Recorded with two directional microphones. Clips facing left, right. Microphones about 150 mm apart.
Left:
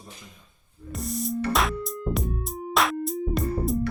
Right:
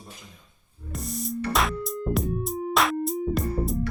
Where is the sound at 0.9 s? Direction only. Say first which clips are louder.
Left 3 dB; centre (ahead or behind).